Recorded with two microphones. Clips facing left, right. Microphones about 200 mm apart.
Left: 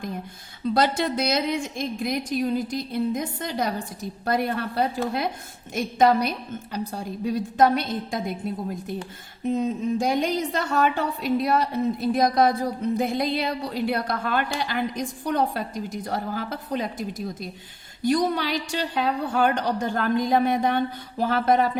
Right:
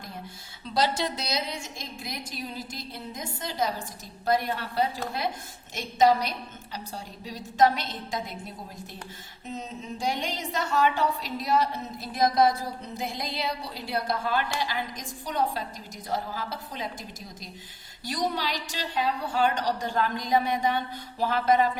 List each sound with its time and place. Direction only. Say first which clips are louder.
0.6 s a woman's voice: left 5 dB; 55° left (ahead or behind)
9.4 s a woman's voice: left 13 dB; 55° left (ahead or behind)